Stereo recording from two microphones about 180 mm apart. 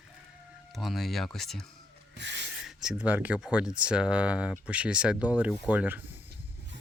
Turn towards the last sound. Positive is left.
turn(degrees=-10)  # may be behind; listen again after turning